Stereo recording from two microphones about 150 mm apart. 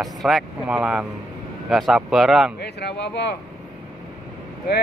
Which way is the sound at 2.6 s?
90° left.